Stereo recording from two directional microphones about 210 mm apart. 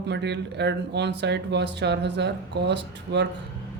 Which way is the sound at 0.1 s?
55° right (ahead or behind).